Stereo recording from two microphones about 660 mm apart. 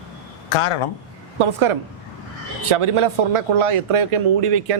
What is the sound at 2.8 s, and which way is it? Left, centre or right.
Speech, right.